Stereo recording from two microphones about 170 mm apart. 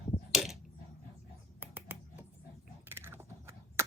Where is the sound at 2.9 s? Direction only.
15° right (ahead or behind).